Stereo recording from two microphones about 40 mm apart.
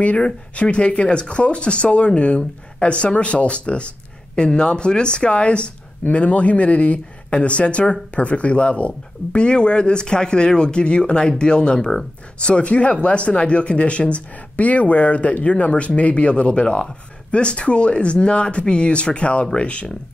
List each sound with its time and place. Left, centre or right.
0.0 s speech: left